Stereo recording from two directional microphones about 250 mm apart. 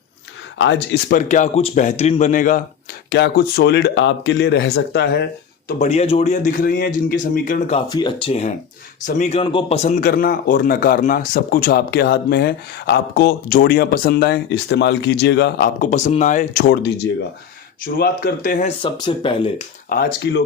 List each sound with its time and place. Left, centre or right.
0.6 s speech: left
1.1 s speech: left
5.8 s speech: left
7.9 s speech: centre
17.9 s speech: left
18.8 s speech: centre
19.9 s speech: left